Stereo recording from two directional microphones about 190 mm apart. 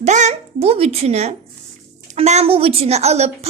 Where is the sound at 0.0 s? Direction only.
40° right (ahead or behind).